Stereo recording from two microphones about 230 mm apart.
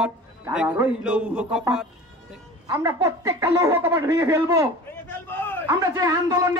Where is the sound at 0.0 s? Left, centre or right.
Centre.